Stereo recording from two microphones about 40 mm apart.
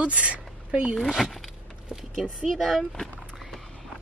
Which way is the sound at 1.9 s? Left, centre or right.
Centre.